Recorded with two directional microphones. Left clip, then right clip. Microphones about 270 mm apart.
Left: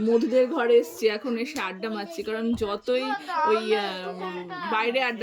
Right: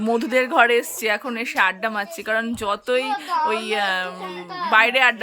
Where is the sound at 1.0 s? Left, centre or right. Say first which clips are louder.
Right 3 dB; centre.